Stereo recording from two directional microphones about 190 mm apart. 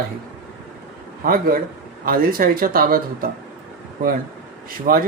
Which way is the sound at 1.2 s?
50° right (ahead or behind).